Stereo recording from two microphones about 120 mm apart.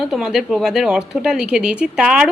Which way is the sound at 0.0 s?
5° right (ahead or behind).